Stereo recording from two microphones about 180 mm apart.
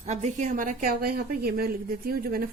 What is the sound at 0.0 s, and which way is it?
A woman's voice, 40° right (ahead or behind).